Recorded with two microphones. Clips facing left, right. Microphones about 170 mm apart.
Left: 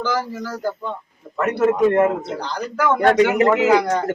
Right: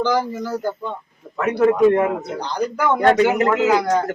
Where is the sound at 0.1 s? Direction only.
20° right (ahead or behind).